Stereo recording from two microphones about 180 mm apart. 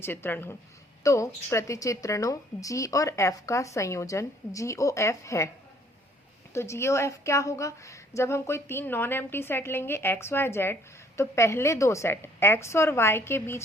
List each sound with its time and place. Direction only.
0.0 s speech: 10° left (ahead or behind)
6.5 s speech: 15° left (ahead or behind)